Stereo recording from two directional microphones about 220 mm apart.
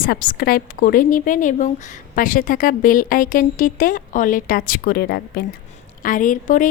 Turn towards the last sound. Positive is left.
turn(degrees=35)  # may be behind; listen again after turning